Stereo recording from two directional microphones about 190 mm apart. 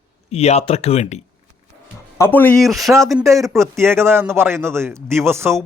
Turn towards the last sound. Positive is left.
turn(degrees=-15)  # may be behind; listen again after turning